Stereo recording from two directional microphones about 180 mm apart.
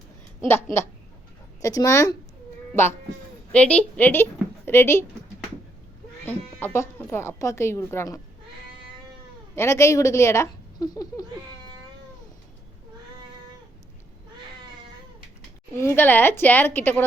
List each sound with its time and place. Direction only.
0.4 s speech: 15° left (ahead or behind)
3.5 s speech: 5° left (ahead or behind)
6.2 s speech: 10° left (ahead or behind)
9.6 s speech: 15° left (ahead or behind)
15.7 s speech: 15° left (ahead or behind)